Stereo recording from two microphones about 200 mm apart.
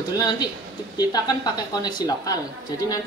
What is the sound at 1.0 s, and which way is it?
Speech, 20° left (ahead or behind).